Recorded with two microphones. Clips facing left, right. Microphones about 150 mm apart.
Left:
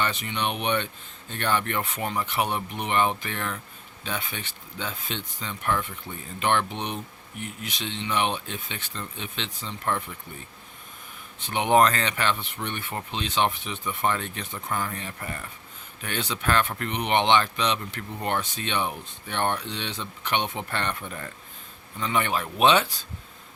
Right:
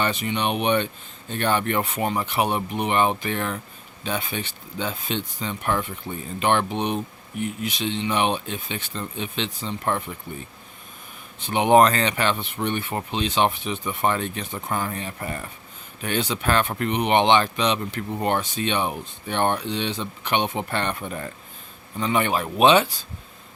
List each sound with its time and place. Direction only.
0.0 s speech: 10° right (ahead or behind)
7.6 s speech: 15° right (ahead or behind)
9.6 s speech: 25° right (ahead or behind)
11.4 s speech: 15° right (ahead or behind)